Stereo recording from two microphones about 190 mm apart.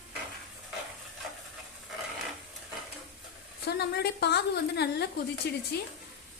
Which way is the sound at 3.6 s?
60° left (ahead or behind).